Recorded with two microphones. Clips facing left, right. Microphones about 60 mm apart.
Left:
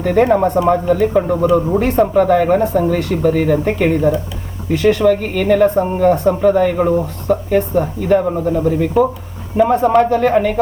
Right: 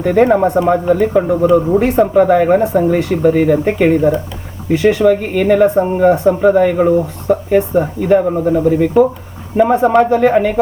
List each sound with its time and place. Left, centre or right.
0.0 s speech: centre
1.8 s speech: centre
8.2 s speech: centre